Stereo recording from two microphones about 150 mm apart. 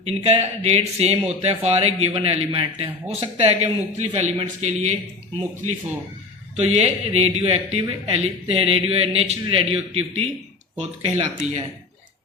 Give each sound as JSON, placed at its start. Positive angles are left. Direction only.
{"t": 0.0, "sound": "a man's voice", "side_deg": -45}
{"t": 6.6, "sound": "a man's voice", "side_deg": -45}